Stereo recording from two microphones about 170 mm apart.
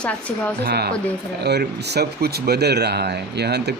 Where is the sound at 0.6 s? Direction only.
70° right (ahead or behind).